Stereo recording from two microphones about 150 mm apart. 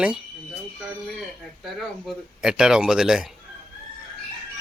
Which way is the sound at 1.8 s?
Centre (ahead or behind).